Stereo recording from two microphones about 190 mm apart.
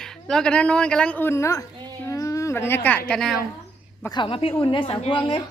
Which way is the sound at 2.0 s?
15° left (ahead or behind).